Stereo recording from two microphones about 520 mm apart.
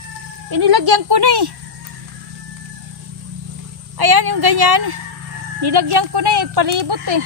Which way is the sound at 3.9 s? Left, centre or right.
Right.